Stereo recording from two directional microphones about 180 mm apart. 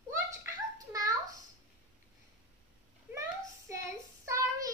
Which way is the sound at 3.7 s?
15° right (ahead or behind).